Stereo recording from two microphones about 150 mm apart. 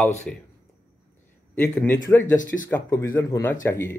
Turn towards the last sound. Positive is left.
turn(degrees=20)  # may be behind; listen again after turning